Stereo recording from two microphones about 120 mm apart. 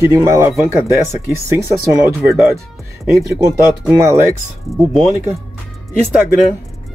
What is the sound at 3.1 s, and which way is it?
Speech, centre (ahead or behind).